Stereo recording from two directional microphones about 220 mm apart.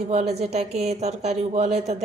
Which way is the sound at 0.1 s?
30° right (ahead or behind).